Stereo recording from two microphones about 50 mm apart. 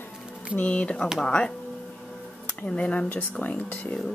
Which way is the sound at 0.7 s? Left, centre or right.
Left.